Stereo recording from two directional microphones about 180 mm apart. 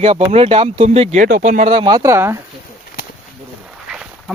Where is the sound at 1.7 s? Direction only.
25° right (ahead or behind).